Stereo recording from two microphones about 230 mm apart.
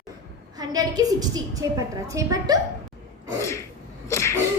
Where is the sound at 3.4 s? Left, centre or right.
Centre.